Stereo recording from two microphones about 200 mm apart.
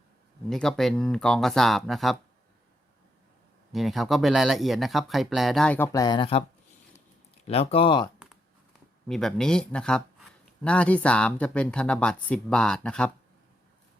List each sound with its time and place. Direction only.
0.5 s speech: centre (ahead or behind)
3.7 s speech: centre (ahead or behind); by 6.4 s 25° left (ahead or behind)
7.4 s speech: 30° left (ahead or behind)
9.0 s speech: centre (ahead or behind)